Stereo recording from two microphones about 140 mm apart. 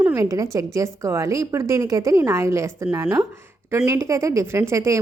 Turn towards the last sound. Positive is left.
turn(degrees=-20)  # may be behind; listen again after turning